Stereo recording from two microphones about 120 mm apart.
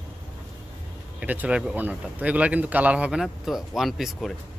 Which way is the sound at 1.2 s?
10° right (ahead or behind).